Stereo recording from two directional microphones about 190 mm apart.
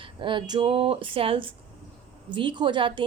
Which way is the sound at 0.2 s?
25° right (ahead or behind).